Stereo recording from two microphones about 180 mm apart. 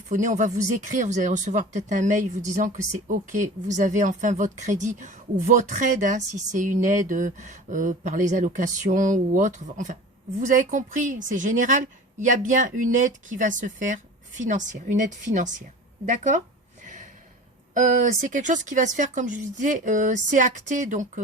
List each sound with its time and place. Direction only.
0.1 s speech: 45° right (ahead or behind)
16.8 s gasp: 45° right (ahead or behind)
17.7 s speech: 45° right (ahead or behind)